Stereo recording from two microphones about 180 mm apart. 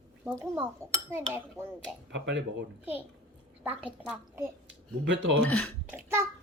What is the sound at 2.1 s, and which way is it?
Speech, 75° right (ahead or behind).